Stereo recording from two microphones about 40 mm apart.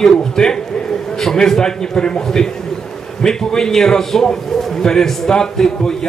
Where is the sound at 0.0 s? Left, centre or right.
Centre.